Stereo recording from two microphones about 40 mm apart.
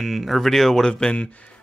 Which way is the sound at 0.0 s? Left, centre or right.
Centre.